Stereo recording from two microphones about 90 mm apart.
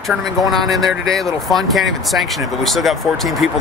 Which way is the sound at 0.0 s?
Centre (ahead or behind).